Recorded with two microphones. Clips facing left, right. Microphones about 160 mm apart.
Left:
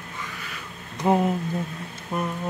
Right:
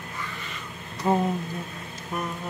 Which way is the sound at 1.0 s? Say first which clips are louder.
Left 3 dB; 15° left (ahead or behind).